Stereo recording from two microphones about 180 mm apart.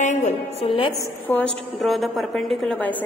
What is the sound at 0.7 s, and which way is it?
Speech, 25° left (ahead or behind).